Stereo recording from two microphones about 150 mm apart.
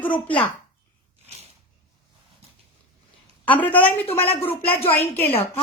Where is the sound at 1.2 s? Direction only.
45° right (ahead or behind).